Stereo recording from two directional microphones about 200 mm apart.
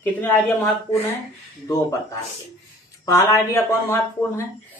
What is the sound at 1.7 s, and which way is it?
A man's voice, 15° left (ahead or behind).